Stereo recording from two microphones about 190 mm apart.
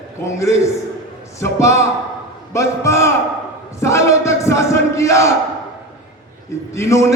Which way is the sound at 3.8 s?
15° left (ahead or behind).